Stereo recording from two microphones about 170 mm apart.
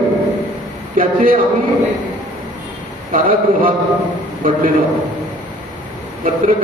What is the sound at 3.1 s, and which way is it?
Speech, 55° right (ahead or behind).